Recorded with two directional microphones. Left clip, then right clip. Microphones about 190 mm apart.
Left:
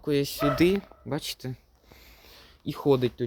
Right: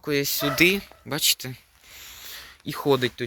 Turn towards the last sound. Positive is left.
turn(degrees=10)  # may be behind; listen again after turning